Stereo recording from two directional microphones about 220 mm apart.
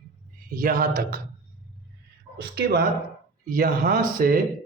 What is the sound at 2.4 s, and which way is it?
Speech, 45° right (ahead or behind).